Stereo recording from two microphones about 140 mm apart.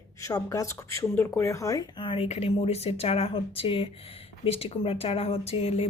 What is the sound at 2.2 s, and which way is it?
Speech, 50° left (ahead or behind).